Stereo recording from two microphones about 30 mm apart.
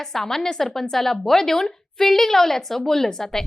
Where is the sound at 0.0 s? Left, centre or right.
Centre.